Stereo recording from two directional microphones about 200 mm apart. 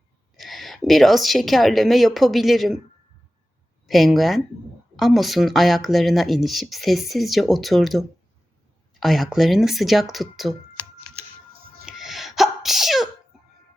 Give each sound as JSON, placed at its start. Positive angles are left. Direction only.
{"t": 0.3, "sound": "a woman's voice", "side_deg": 0}
{"t": 3.8, "sound": "speech", "side_deg": 0}
{"t": 11.9, "sound": "sneeze", "side_deg": 0}